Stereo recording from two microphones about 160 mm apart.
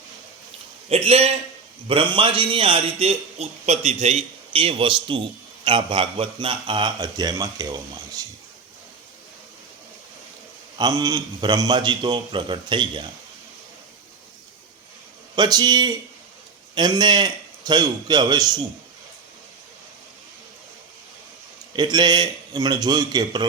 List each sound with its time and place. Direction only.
0.9 s a man's voice: 40° right (ahead or behind); by 8.3 s 25° right (ahead or behind)
10.8 s a man's voice: 25° right (ahead or behind)
15.4 s a man's voice: 25° right (ahead or behind)
21.8 s a man's voice: 25° right (ahead or behind)